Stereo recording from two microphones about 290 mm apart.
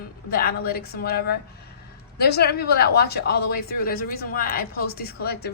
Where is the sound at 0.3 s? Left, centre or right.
Left.